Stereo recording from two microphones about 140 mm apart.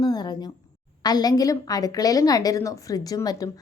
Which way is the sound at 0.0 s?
30° left (ahead or behind).